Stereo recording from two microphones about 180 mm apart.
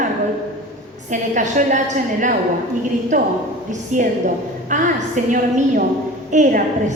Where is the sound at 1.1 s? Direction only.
45° right (ahead or behind).